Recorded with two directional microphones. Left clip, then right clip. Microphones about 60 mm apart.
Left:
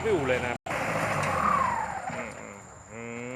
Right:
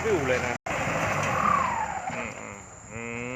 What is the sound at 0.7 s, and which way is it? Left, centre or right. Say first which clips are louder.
Vehicle: right 1 dB; centre.